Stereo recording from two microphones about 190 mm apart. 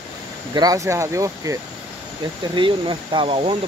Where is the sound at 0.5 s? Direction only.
20° right (ahead or behind).